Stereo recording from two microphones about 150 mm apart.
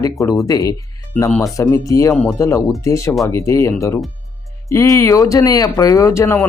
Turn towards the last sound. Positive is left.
turn(degrees=15)  # may be behind; listen again after turning